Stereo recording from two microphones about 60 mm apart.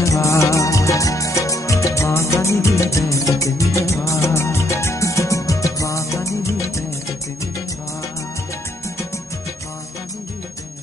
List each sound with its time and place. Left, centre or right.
0.0 s music: left